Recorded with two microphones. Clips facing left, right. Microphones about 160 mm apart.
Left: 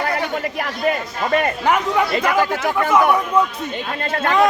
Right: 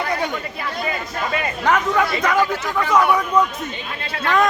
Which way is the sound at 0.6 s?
55° left (ahead or behind).